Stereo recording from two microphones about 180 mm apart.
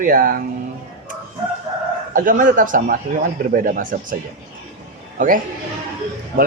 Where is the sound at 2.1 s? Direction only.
50° right (ahead or behind).